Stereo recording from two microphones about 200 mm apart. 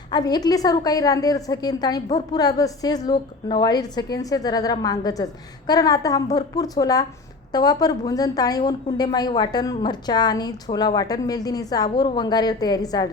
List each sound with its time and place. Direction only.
0.1 s a woman's voice: 20° left (ahead or behind)